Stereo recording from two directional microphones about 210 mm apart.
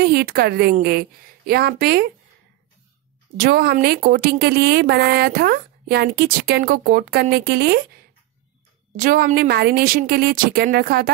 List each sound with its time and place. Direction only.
0.0 s speech: 50° right (ahead or behind)
3.3 s speech: 45° right (ahead or behind)
9.0 s speech: 45° right (ahead or behind)